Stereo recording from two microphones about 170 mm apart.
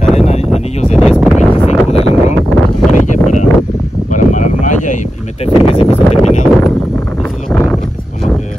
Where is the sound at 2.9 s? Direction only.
45° left (ahead or behind).